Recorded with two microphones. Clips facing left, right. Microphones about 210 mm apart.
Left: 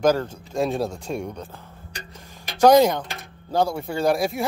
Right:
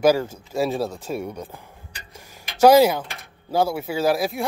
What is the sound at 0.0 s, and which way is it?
Speech, 10° right (ahead or behind).